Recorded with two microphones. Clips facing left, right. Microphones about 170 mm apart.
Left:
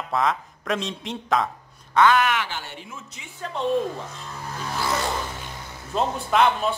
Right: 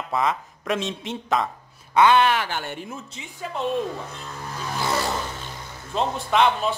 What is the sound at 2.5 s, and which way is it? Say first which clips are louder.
Speech: right 5 dB; 55° right (ahead or behind).